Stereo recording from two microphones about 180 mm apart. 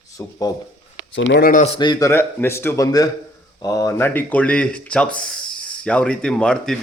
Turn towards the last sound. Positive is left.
turn(degrees=5)  # may be behind; listen again after turning